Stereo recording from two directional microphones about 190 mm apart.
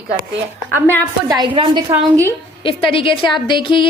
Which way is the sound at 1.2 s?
20° right (ahead or behind).